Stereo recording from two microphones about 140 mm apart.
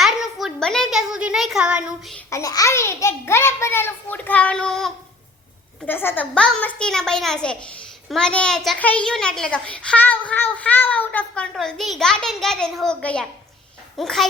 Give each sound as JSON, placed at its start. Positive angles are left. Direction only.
{"t": 0.0, "sound": "a child's voice", "side_deg": 0}
{"t": 2.3, "sound": "a child's voice", "side_deg": 25}
{"t": 5.8, "sound": "a child's voice", "side_deg": 15}